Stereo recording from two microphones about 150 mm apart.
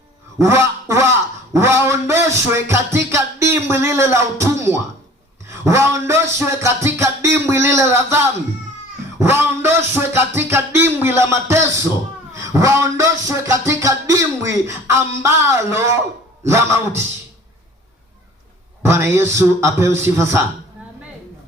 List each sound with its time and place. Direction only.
0.3 s a sound: 20° right (ahead or behind)
5.5 s speech: 20° right (ahead or behind)
6.4 s music: 20° right (ahead or behind)
18.9 s music: 15° right (ahead or behind)